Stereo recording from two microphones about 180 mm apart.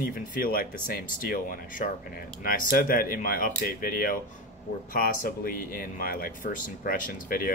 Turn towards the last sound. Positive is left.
turn(degrees=50)  # may be behind; listen again after turning